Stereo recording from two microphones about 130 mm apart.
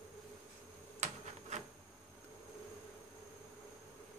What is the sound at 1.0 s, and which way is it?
Typewriter, 60° right (ahead or behind).